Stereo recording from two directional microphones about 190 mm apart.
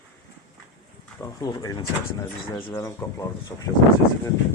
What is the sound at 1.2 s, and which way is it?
Speech, 20° left (ahead or behind).